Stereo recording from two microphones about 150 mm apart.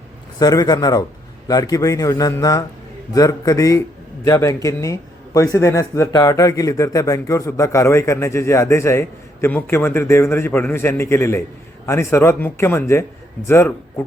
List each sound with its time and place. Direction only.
0.3 s a man's voice: 25° left (ahead or behind)